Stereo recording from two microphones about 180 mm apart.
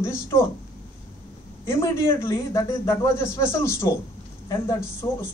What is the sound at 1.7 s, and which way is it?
A woman's voice, 15° left (ahead or behind).